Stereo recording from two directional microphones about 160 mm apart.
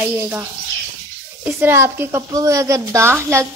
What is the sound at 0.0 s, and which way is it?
A woman's voice, 10° right (ahead or behind).